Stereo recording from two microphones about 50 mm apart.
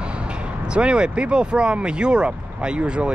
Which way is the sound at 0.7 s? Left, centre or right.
Centre.